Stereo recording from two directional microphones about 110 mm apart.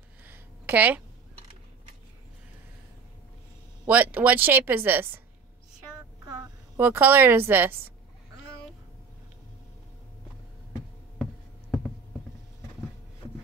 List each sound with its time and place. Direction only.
0.2 s a sound: 15° right (ahead or behind)
3.8 s speech: 15° right (ahead or behind)
6.8 s speech: 20° right (ahead or behind)